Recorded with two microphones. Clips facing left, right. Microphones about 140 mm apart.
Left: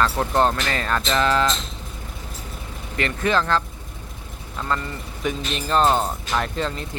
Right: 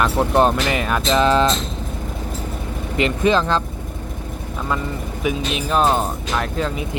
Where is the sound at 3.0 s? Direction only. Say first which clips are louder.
Right 5 dB; 20° right (ahead or behind).